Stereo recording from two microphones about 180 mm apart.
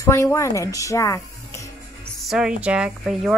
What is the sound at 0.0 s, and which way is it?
Speech, 15° left (ahead or behind).